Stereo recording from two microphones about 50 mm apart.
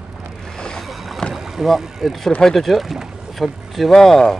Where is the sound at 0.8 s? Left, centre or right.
Centre.